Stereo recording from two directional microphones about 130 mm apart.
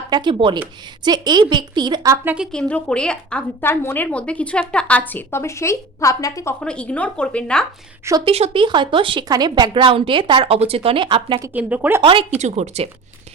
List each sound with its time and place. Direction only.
0.1 s a woman's voice: 35° right (ahead or behind)
2.2 s speech: 10° right (ahead or behind)
2.5 s a woman's voice: 10° left (ahead or behind); by 6.6 s 25° left (ahead or behind)
6.6 s a woman's voice: 10° left (ahead or behind)
8.2 s a woman's voice: 45° right (ahead or behind)
11.5 s speech: 10° right (ahead or behind)
12.4 s speech: 60° right (ahead or behind)